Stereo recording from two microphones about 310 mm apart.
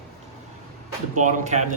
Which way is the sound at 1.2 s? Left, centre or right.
Right.